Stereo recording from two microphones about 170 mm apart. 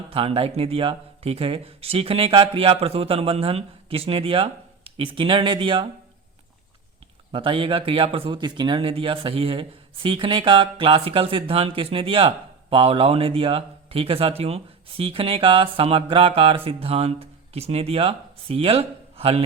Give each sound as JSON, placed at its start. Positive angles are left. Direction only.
{"t": 0.1, "sound": "speech", "side_deg": -30}
{"t": 7.3, "sound": "speech", "side_deg": -30}